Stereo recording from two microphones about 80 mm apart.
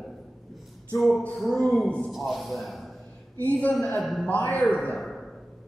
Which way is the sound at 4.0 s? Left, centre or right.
Centre.